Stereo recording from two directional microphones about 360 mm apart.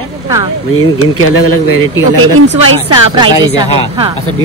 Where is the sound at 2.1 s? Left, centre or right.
Right.